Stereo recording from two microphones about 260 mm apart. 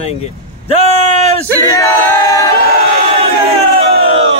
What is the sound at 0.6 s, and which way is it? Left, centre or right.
Battle cry, left.